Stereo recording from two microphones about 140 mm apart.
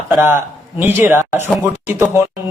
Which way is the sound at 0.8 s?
15° right (ahead or behind).